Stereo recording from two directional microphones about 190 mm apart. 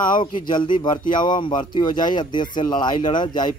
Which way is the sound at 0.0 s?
25° left (ahead or behind).